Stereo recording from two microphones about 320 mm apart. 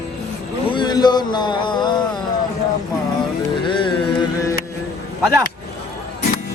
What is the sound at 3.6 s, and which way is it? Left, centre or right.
Music, centre.